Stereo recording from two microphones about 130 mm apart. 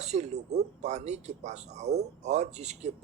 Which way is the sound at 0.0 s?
60° right (ahead or behind).